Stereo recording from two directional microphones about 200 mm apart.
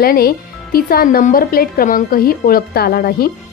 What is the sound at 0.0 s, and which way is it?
A woman's voice, 50° left (ahead or behind).